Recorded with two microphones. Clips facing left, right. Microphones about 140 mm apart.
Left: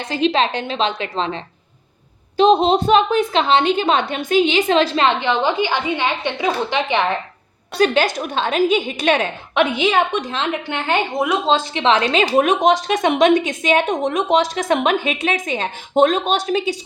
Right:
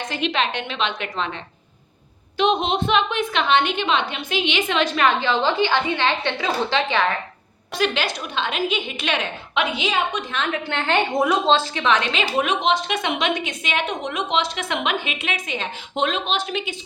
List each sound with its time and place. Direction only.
0.0 s a woman's voice: 30° left (ahead or behind)
2.4 s a woman's voice: 35° left (ahead or behind); by 7.0 s 15° left (ahead or behind)
7.8 s a woman's voice: 45° left (ahead or behind)
10.2 s a woman's voice: 30° left (ahead or behind)
10.7 s a woman's voice: 10° left (ahead or behind)
11.7 s a woman's voice: 25° left (ahead or behind)